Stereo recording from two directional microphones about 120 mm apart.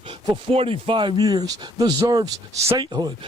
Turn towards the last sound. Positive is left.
turn(degrees=-35)  # may be behind; listen again after turning